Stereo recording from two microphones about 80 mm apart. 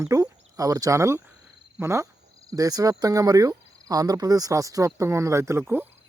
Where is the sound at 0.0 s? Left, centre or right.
Right.